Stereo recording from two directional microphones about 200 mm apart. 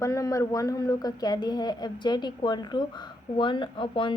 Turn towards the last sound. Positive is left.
turn(degrees=25)  # may be behind; listen again after turning